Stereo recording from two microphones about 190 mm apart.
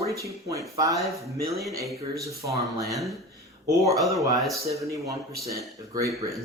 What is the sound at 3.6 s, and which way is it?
Speech, 15° right (ahead or behind).